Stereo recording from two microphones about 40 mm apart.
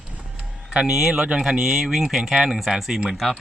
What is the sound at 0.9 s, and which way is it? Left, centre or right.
Speech, centre.